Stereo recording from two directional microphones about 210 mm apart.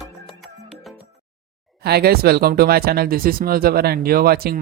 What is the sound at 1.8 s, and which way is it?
Speech, 50° right (ahead or behind).